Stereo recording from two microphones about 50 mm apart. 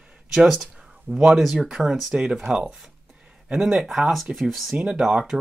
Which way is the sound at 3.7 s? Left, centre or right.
Centre.